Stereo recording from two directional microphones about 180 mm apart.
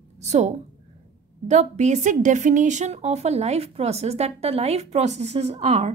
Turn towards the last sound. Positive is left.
turn(degrees=-40)  # may be behind; listen again after turning